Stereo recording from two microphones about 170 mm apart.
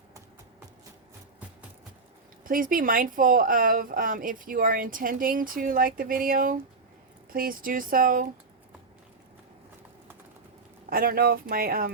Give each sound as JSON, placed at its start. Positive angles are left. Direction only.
{"t": 2.4, "sound": "speech", "side_deg": -55}
{"t": 10.8, "sound": "speech", "side_deg": -60}